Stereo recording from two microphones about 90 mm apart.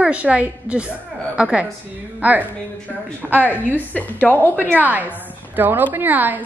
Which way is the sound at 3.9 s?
20° left (ahead or behind).